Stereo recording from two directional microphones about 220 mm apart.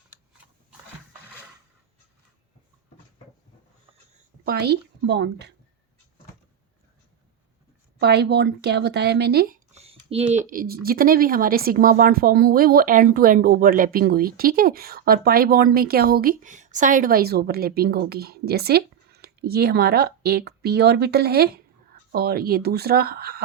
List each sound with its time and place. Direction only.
4.4 s speech: 45° right (ahead or behind)
7.9 s speech: 50° right (ahead or behind)
9.7 s a sound: 25° right (ahead or behind)
10.3 s speech: 35° right (ahead or behind)